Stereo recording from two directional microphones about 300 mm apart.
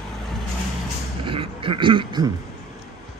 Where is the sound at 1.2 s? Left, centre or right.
Centre.